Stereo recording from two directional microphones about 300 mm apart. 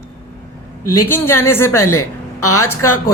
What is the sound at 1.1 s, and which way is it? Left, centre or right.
Speech, centre.